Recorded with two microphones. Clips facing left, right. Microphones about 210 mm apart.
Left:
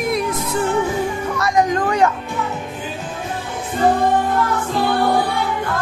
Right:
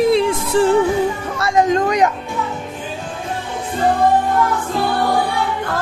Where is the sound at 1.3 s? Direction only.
25° right (ahead or behind).